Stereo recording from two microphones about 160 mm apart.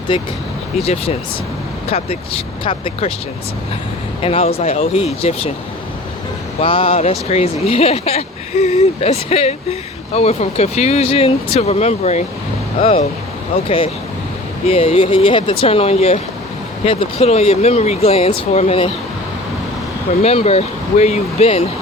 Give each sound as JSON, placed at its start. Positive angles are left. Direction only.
{"t": 0.1, "sound": "speech", "side_deg": 30}
{"t": 4.2, "sound": "speech", "side_deg": 40}
{"t": 6.6, "sound": "speech", "side_deg": 35}
{"t": 20.2, "sound": "speech", "side_deg": 40}